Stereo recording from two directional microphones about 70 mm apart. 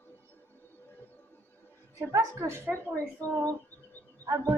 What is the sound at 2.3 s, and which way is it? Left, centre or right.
Speech, right.